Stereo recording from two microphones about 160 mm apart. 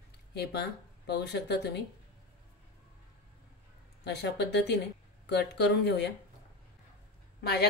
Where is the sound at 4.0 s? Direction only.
90° left.